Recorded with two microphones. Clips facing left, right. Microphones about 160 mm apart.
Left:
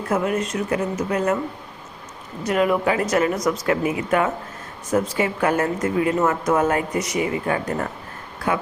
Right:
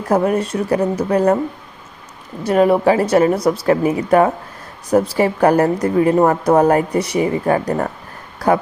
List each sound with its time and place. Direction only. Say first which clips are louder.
0.1 s speech: right 6 dB; 35° right (ahead or behind)
2.4 s speech: right 6 dB; 35° right (ahead or behind)